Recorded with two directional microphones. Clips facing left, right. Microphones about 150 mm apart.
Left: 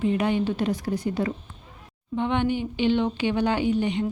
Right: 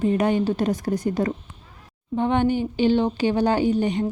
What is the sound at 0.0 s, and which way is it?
A woman's voice, 45° right (ahead or behind).